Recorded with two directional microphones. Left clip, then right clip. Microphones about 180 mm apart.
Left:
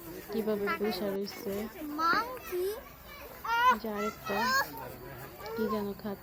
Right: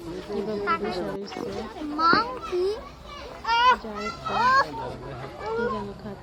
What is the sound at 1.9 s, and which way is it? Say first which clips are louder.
Speech: right 8 dB; 65° left (ahead or behind).